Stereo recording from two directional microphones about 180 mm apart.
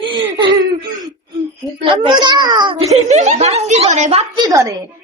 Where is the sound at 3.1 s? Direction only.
40° right (ahead or behind).